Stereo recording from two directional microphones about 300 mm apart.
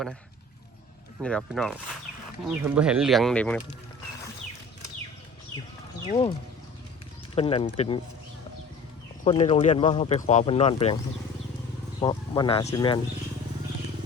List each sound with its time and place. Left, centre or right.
1.2 s speech: centre
6.1 s speech: centre
7.3 s speech: centre
9.2 s speech: left
11.9 s speech: centre